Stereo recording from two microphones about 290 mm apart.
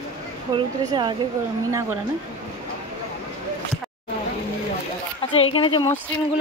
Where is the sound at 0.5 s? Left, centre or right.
Centre.